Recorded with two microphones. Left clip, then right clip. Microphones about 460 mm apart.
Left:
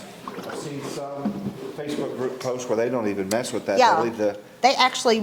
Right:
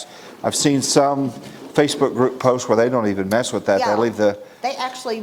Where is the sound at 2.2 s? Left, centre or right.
Right.